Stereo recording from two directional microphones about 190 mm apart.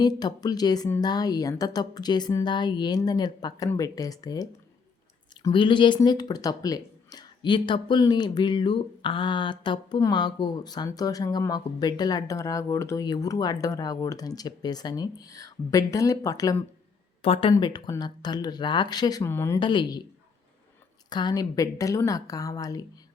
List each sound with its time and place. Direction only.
0.0 s speech: 20° left (ahead or behind)
17.2 s speech: 30° left (ahead or behind); by 19.5 s 15° left (ahead or behind)
19.5 s speech: 25° left (ahead or behind)
21.1 s speech: 20° left (ahead or behind)